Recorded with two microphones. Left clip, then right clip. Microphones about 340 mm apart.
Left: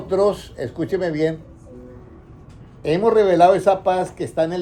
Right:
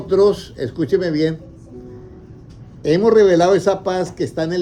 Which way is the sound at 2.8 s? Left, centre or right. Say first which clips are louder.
Right 4 dB; centre.